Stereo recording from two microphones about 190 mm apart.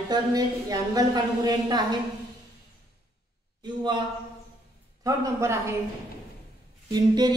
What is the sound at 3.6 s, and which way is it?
Speech, 25° right (ahead or behind).